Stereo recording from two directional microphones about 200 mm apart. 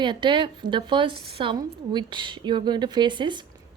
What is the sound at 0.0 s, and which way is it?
A woman's voice, 25° right (ahead or behind).